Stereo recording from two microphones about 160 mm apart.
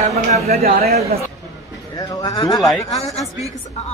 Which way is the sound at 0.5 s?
70° right (ahead or behind).